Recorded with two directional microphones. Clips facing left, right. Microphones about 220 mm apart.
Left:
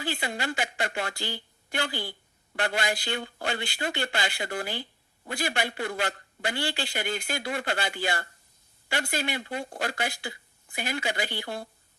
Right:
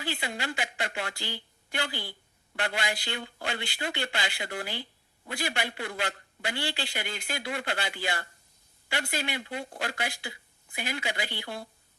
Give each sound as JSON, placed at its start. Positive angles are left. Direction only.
{"t": 0.0, "sound": "a man's voice", "side_deg": 45}